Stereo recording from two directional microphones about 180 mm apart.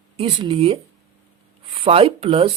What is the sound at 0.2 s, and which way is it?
A woman's voice, 30° right (ahead or behind).